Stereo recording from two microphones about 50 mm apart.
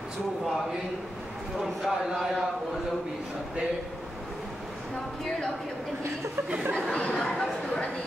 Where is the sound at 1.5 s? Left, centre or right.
Centre.